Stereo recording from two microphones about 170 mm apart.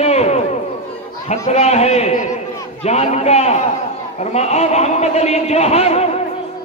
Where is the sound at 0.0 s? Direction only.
40° left (ahead or behind).